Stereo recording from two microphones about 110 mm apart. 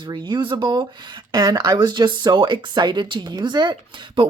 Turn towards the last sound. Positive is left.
turn(degrees=-45)  # may be behind; listen again after turning